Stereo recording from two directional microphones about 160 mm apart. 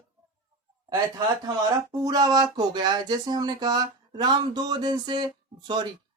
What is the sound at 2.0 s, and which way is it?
Speech, 25° right (ahead or behind).